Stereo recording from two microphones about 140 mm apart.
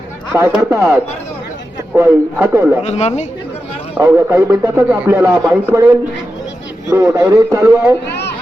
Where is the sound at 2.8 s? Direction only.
55° left (ahead or behind).